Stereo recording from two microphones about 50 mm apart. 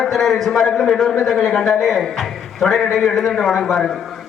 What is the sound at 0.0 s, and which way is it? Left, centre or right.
A man's voice, centre.